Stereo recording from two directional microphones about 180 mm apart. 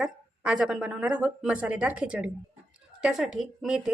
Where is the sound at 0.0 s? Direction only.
5° right (ahead or behind).